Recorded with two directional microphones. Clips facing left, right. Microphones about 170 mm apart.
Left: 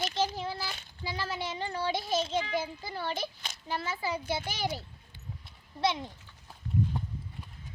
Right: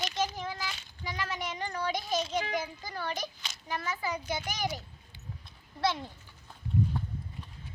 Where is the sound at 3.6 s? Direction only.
30° left (ahead or behind).